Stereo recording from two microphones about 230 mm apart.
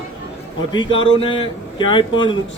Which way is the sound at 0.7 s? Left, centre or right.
Left.